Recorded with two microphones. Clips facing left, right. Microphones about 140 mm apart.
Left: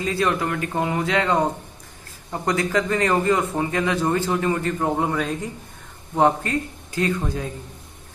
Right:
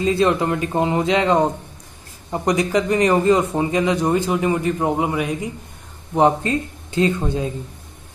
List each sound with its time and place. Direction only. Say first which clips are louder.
0.0 s a man's voice: right 5 dB; 25° right (ahead or behind)